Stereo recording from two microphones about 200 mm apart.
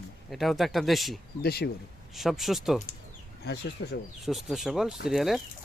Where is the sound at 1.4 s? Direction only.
50° left (ahead or behind).